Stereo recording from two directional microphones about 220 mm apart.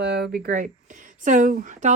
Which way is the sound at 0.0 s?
50° right (ahead or behind).